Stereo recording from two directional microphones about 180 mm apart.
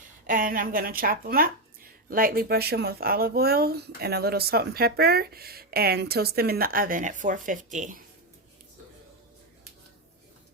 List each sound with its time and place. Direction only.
0.3 s a woman's voice: 50° right (ahead or behind)